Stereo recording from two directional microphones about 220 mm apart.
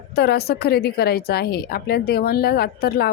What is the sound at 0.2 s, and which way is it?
Speech, 45° left (ahead or behind).